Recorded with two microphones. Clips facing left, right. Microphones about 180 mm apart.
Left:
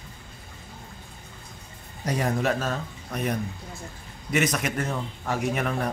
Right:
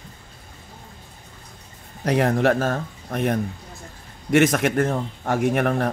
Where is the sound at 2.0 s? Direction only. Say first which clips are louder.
Right 7 dB; 60° right (ahead or behind).